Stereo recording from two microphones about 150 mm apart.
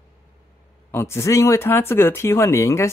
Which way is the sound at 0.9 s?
15° left (ahead or behind).